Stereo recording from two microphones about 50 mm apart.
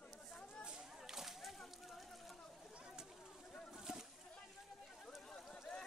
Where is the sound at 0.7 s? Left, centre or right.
Centre.